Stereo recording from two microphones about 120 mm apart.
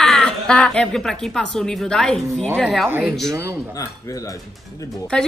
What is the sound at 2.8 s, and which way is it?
Speech, 20° right (ahead or behind).